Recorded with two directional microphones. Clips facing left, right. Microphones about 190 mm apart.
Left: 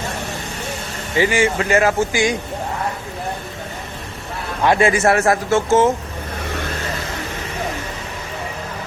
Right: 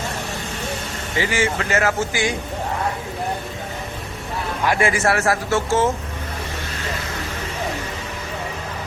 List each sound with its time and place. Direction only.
1.2 s a man's voice: 15° left (ahead or behind)
4.8 s a man's voice: 20° left (ahead or behind)